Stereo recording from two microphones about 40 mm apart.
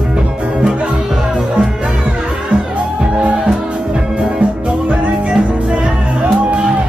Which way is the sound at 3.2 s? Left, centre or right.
Right.